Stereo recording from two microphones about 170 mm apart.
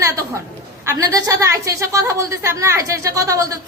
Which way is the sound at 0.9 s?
20° right (ahead or behind).